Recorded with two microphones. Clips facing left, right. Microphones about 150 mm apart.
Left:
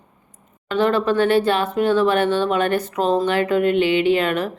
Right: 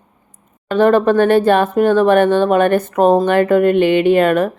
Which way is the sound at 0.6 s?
50° right (ahead or behind).